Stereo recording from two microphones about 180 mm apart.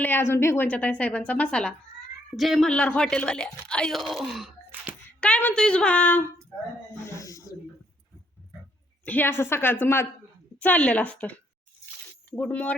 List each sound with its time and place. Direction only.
0.0 s a woman's voice: 10° left (ahead or behind); by 4.9 s 5° right (ahead or behind)
5.2 s a woman's voice: 10° left (ahead or behind)
6.9 s snake: 15° left (ahead or behind)
9.0 s a woman's voice: 10° left (ahead or behind)
12.4 s a woman's voice: 10° left (ahead or behind)